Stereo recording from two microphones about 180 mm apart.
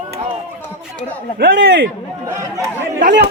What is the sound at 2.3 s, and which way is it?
Speech, 15° right (ahead or behind).